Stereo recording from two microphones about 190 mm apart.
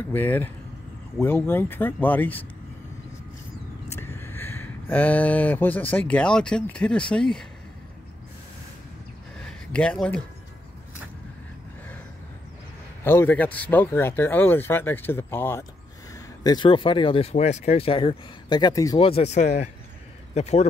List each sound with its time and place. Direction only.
0.1 s speech: 10° left (ahead or behind)
3.9 s speech: 10° left (ahead or behind)
9.4 s a sound: 5° left (ahead or behind)
13.0 s speech: 10° left (ahead or behind)
16.4 s speech: 25° left (ahead or behind)
18.9 s speech: 30° left (ahead or behind)